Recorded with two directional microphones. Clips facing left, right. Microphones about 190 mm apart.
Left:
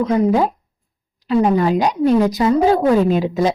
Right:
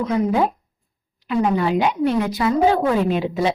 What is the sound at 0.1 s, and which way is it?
A woman's voice, 40° left (ahead or behind).